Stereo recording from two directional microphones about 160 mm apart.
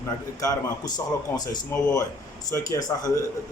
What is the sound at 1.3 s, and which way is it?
A man's voice, 25° left (ahead or behind).